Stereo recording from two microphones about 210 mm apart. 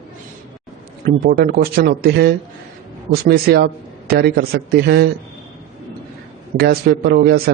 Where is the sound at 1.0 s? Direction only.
45° right (ahead or behind).